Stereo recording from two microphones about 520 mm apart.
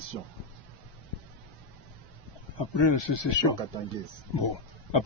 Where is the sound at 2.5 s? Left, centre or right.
Left.